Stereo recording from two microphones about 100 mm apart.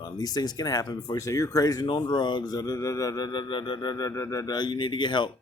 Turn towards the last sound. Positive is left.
turn(degrees=50)  # may be behind; listen again after turning